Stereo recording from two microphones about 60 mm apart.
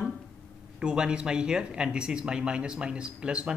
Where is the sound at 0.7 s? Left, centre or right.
Centre.